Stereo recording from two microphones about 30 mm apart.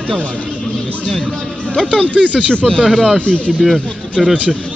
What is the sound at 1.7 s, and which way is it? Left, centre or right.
Speech, left.